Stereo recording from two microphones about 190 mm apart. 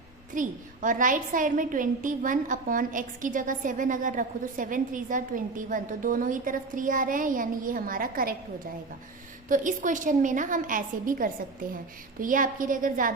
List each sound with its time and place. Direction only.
0.3 s a woman's voice: 45° right (ahead or behind)
9.5 s a woman's voice: 40° right (ahead or behind)